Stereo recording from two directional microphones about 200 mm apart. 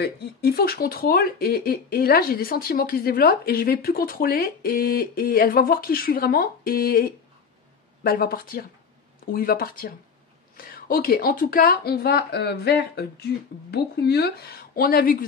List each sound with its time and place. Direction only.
0.0 s speech: 50° left (ahead or behind)